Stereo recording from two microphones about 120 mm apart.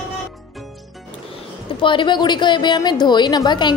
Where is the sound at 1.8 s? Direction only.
40° left (ahead or behind).